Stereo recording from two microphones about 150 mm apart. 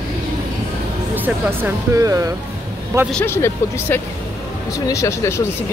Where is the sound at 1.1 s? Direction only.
15° right (ahead or behind).